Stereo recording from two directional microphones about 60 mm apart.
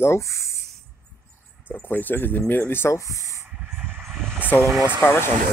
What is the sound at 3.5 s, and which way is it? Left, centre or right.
Vehicle, right.